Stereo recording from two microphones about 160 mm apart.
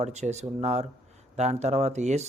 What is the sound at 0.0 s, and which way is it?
Speech, 45° right (ahead or behind).